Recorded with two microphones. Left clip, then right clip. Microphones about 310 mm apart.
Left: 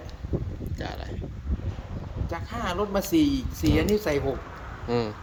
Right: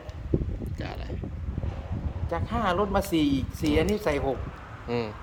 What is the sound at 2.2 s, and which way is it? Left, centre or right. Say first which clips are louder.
Speech: right 4 dB; centre.